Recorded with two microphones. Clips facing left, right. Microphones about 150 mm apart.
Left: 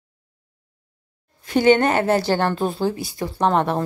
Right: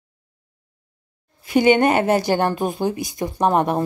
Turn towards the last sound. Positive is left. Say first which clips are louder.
# right 1 dB
turn(degrees=-15)  # may be behind; listen again after turning